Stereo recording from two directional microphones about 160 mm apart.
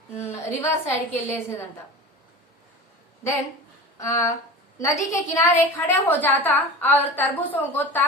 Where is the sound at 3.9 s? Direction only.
20° left (ahead or behind).